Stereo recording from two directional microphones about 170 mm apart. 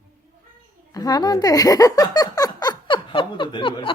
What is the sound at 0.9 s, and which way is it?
Speech, 25° left (ahead or behind).